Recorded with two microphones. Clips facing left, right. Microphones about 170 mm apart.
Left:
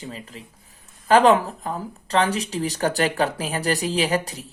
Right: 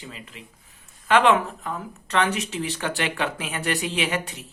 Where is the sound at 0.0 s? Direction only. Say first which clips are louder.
Left 5 dB; 40° left (ahead or behind).